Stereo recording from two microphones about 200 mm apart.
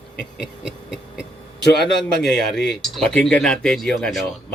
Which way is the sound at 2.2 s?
Centre (ahead or behind).